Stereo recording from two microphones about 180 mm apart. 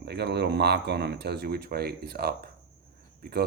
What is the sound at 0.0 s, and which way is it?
Speech, 70° right (ahead or behind).